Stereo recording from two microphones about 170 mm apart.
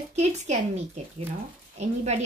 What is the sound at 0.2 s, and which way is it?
A woman's voice, 40° right (ahead or behind).